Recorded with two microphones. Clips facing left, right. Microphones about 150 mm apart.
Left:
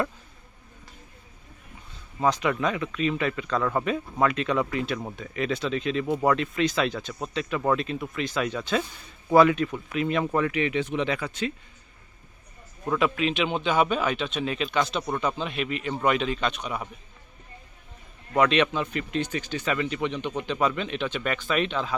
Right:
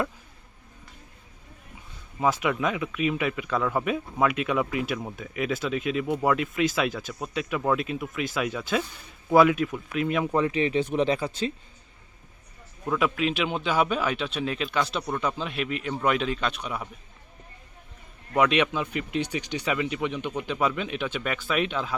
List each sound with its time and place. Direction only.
2.2 s speech: 5° right (ahead or behind)
10.3 s speech: 25° right (ahead or behind)
12.8 s speech: centre (ahead or behind)
18.3 s speech: 10° right (ahead or behind)